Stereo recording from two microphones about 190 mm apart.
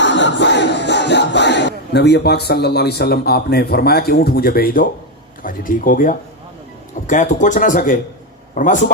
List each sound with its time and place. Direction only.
0.0 s music: 70° left (ahead or behind); by 4.9 s 50° left (ahead or behind)
5.4 s speech: 45° left (ahead or behind)